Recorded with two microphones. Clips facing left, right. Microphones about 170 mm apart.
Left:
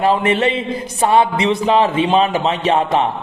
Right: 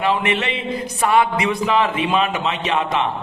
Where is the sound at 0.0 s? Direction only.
35° left (ahead or behind).